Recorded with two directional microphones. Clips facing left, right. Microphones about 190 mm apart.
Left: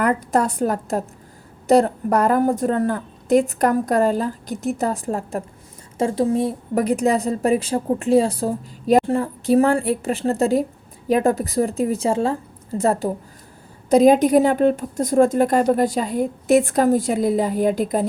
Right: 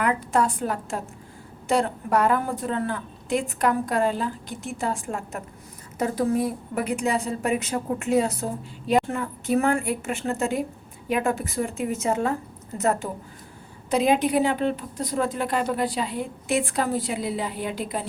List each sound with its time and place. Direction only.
0.0 s a woman's voice: 40° left (ahead or behind)